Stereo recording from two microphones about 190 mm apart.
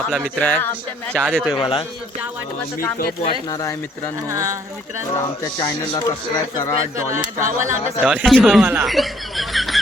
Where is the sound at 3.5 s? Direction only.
15° left (ahead or behind).